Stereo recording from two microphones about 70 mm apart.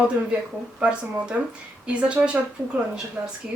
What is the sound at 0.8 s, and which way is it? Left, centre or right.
Speech, centre.